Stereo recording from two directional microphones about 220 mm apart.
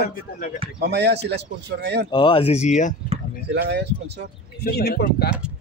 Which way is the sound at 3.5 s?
50° right (ahead or behind).